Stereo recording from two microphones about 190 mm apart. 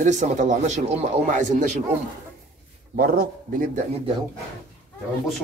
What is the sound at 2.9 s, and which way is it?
Speech, 50° right (ahead or behind).